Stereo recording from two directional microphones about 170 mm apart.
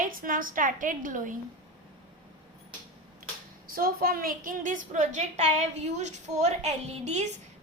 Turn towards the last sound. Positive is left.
turn(degrees=-40)  # may be behind; listen again after turning